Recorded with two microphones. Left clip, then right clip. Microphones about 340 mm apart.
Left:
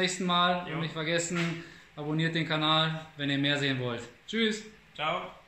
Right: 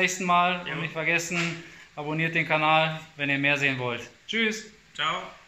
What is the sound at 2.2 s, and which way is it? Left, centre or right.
Speech, centre.